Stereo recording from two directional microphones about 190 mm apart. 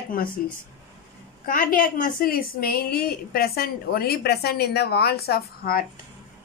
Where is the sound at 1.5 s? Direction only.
45° left (ahead or behind).